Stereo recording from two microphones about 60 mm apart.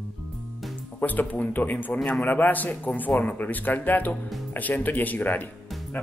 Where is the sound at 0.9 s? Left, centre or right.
Left.